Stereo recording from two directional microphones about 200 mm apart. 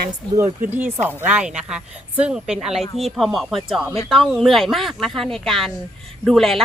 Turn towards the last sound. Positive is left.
turn(degrees=0)  # may be behind; listen again after turning